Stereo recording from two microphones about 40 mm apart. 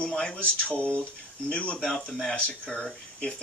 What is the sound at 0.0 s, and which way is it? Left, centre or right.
Speech, left.